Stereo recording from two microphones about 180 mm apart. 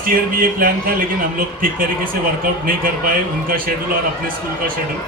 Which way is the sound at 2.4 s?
50° right (ahead or behind).